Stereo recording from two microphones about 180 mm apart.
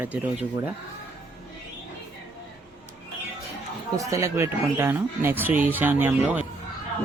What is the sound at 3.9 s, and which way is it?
Speech, 15° right (ahead or behind).